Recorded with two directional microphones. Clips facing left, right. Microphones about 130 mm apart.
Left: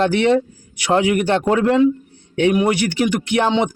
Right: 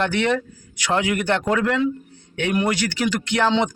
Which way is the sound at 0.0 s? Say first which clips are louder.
Left 6 dB; 25° left (ahead or behind).